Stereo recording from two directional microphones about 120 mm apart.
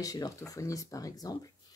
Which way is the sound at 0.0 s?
30° left (ahead or behind).